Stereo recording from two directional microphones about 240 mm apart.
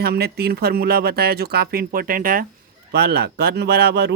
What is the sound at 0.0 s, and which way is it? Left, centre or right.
Speech, right.